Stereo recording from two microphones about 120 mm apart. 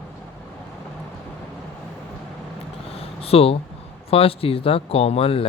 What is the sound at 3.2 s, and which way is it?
Speech, 55° left (ahead or behind).